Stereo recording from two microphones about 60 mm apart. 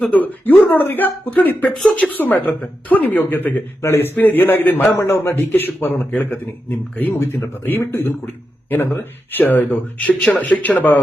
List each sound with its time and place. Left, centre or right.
0.1 s speech: left
1.7 s speech: centre
2.0 s speech: left
3.8 s speech: left